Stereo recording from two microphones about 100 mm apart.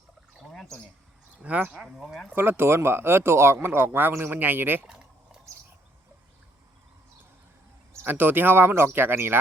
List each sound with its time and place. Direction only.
0.3 s pour: 5° left (ahead or behind)
1.4 s speech: 15° right (ahead or behind)
2.3 s speech: 20° right (ahead or behind)
8.0 s speech: 20° right (ahead or behind)